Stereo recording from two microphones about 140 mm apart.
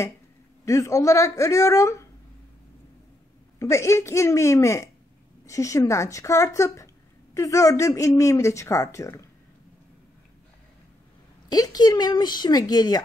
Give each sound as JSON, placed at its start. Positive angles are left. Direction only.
{"t": 0.7, "sound": "speech", "side_deg": 25}
{"t": 3.5, "sound": "speech", "side_deg": 20}
{"t": 11.4, "sound": "speech", "side_deg": 25}